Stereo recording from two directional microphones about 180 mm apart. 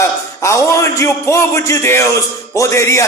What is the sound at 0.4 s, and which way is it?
A man's voice, 15° left (ahead or behind).